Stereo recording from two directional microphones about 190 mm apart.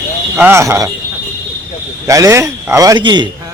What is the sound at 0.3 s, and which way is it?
Speech, 10° right (ahead or behind).